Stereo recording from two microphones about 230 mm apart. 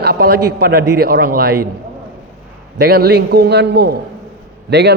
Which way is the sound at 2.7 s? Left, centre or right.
Right.